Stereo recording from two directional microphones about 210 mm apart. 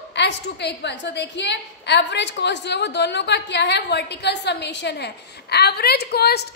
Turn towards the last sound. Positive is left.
turn(degrees=50)  # may be behind; listen again after turning